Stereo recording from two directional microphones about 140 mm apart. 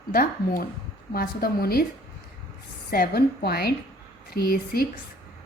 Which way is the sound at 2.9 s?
90° left.